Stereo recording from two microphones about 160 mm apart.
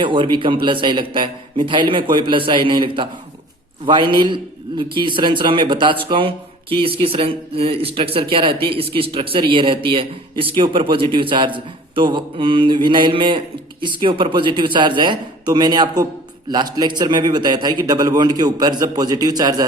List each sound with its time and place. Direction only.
0.0 s a man's voice: 30° right (ahead or behind)